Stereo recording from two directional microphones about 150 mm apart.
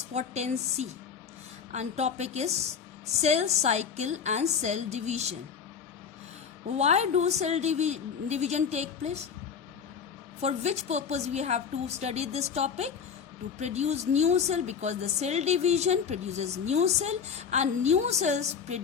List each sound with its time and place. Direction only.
0.1 s a woman's voice: 50° right (ahead or behind)
6.7 s a woman's voice: 50° right (ahead or behind)
10.4 s a woman's voice: 45° right (ahead or behind)